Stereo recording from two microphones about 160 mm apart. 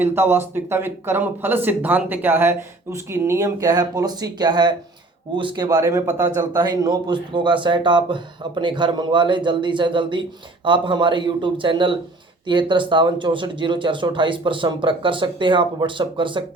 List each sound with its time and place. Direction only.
0.0 s a man's voice: 15° right (ahead or behind); by 16.4 s 30° right (ahead or behind)